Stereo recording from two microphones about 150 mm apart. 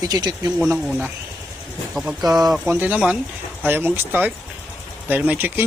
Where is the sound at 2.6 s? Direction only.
10° right (ahead or behind).